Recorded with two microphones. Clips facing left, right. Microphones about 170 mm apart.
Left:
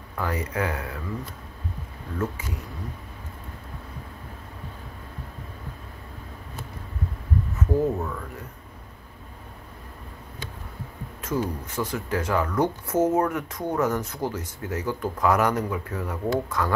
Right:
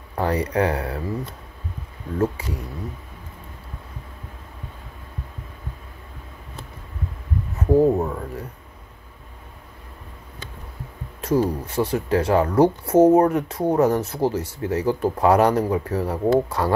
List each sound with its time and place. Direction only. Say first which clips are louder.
0.1 s speech: right 7 dB; 35° right (ahead or behind)
2.1 s speech: right 7 dB; 35° right (ahead or behind)
7.5 s speech: right 8 dB; 35° right (ahead or behind)
11.1 s speech: right 7 dB; 35° right (ahead or behind)